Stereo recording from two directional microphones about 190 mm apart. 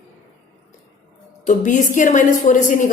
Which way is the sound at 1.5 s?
40° left (ahead or behind).